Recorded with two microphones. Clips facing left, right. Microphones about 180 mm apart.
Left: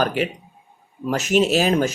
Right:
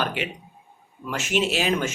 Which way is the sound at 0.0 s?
40° left (ahead or behind).